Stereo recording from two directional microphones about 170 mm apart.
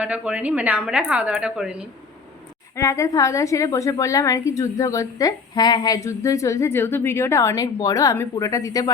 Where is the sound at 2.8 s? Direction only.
15° left (ahead or behind).